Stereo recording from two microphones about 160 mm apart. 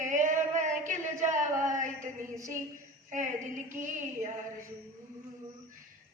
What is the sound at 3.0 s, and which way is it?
Speech, 50° right (ahead or behind).